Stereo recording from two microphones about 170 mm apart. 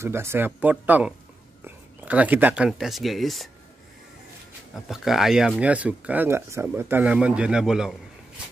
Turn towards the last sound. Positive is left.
turn(degrees=-5)  # may be behind; listen again after turning